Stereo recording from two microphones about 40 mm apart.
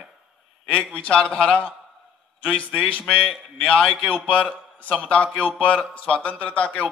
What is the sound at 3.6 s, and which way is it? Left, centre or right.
A man's voice, left.